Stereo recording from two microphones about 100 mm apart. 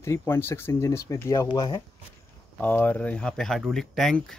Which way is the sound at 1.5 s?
40° left (ahead or behind).